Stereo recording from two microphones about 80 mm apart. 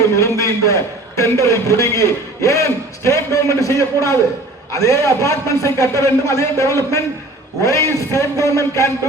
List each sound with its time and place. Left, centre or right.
0.2 s a man's voice: left